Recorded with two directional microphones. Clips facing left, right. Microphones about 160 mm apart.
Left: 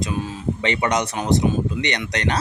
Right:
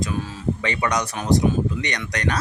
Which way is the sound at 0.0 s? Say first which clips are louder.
Left 1 dB; 20° left (ahead or behind).